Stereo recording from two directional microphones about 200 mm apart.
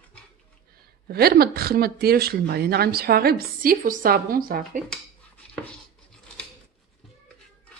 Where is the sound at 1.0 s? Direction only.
50° right (ahead or behind).